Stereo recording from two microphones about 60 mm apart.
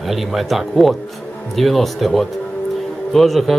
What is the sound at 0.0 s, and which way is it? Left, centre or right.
Speech, centre.